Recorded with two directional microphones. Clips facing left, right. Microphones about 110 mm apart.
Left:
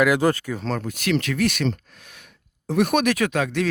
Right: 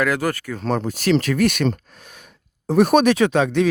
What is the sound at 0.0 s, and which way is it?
Speech, 20° left (ahead or behind).